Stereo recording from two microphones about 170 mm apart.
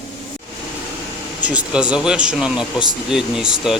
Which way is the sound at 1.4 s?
5° right (ahead or behind).